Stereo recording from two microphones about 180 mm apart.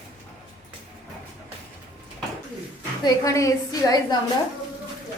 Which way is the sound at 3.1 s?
20° left (ahead or behind).